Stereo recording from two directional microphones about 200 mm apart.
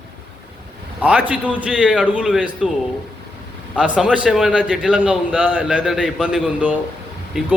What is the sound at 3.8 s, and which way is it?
A man's voice, 5° right (ahead or behind).